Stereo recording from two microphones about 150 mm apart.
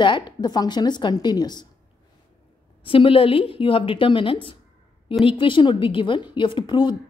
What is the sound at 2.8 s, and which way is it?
Speech, 35° left (ahead or behind).